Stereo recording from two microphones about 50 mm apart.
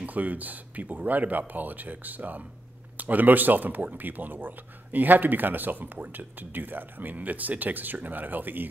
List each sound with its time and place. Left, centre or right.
0.0 s speech: right